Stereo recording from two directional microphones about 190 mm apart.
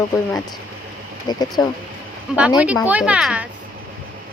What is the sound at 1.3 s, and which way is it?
Speech, 20° left (ahead or behind).